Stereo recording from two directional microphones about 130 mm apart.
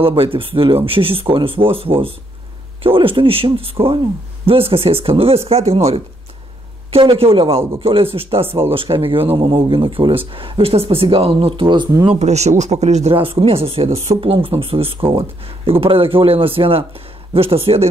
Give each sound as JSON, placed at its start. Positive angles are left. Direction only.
{"t": 0.0, "sound": "speech", "side_deg": -40}
{"t": 12.1, "sound": "speech", "side_deg": -60}
{"t": 13.1, "sound": "speech", "side_deg": -45}